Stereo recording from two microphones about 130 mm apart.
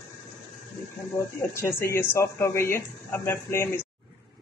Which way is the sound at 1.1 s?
20° left (ahead or behind).